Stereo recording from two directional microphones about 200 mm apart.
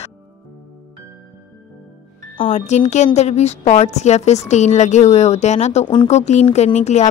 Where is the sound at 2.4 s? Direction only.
35° left (ahead or behind).